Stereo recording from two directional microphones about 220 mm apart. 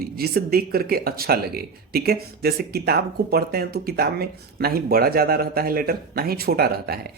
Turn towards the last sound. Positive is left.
turn(degrees=-45)  # may be behind; listen again after turning